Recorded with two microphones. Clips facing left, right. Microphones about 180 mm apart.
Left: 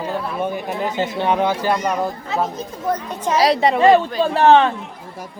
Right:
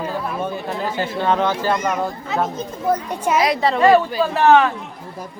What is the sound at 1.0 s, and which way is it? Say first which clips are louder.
Speech: even; 15° left (ahead or behind).